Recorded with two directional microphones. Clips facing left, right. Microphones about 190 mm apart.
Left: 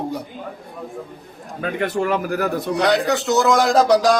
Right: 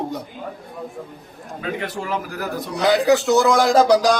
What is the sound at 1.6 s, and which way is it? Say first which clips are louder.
Speech: left 6 dB; 55° left (ahead or behind).